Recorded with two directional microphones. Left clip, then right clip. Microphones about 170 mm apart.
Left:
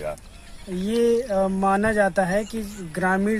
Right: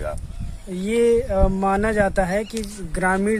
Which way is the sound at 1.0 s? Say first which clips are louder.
Right 2 dB; 15° right (ahead or behind).